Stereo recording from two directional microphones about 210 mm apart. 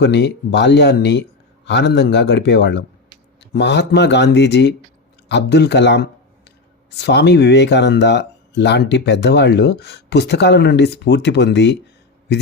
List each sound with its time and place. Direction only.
0.0 s speech: 55° left (ahead or behind)